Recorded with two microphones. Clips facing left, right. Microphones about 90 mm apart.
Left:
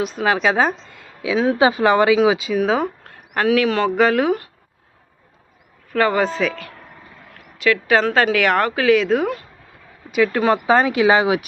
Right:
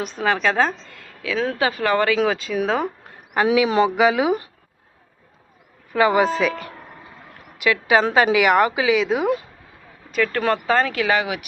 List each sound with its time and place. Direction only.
0.0 s a woman's voice: 5° left (ahead or behind)
3.0 s a sound: 10° right (ahead or behind)
3.9 s speech: 5° right (ahead or behind)
5.9 s a woman's voice: 10° right (ahead or behind)
7.6 s a woman's voice: 15° right (ahead or behind)
10.1 s a woman's voice: 10° left (ahead or behind); by 11.3 s 25° left (ahead or behind)